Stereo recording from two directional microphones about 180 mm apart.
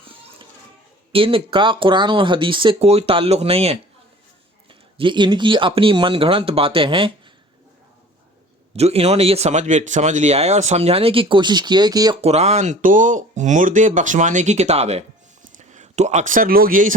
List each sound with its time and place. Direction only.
0.0 s children playing: 30° right (ahead or behind)
1.1 s speech: 30° right (ahead or behind)
8.7 s speech: 35° right (ahead or behind)
12.2 s speech: 35° right (ahead or behind)